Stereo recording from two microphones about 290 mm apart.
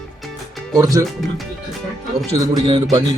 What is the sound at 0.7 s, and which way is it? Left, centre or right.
Speech, centre.